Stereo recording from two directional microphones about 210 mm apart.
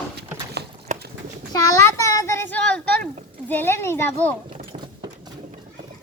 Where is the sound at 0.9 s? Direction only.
35° right (ahead or behind).